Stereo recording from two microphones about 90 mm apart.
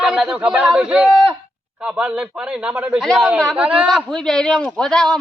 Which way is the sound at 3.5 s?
15° right (ahead or behind).